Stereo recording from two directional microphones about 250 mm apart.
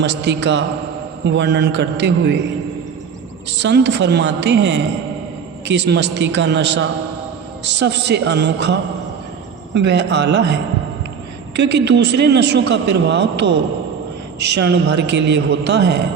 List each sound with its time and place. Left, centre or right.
0.0 s a man's voice: right
3.6 s a man's voice: right